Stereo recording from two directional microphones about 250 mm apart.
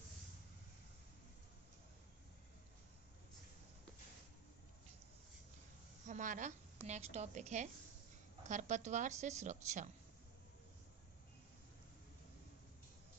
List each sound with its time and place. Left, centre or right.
6.1 s a woman's voice: right